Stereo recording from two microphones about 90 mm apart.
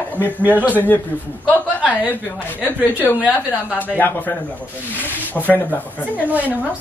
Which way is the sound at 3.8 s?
20° left (ahead or behind).